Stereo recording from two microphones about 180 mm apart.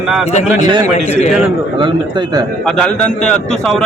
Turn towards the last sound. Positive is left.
turn(degrees=5)  # may be behind; listen again after turning